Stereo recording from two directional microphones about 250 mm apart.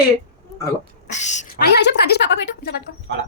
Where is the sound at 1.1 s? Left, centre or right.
Left.